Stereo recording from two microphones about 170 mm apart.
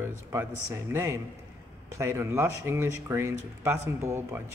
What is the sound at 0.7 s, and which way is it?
Speech, 15° right (ahead or behind).